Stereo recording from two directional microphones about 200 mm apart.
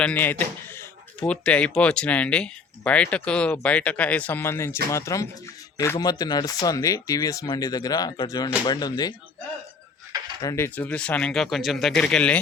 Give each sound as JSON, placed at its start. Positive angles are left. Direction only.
{"t": 0.0, "sound": "speech", "side_deg": 10}
{"t": 10.4, "sound": "speech", "side_deg": 15}